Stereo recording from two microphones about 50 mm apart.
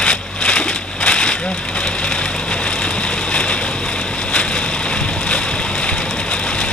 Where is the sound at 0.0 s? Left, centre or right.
Left.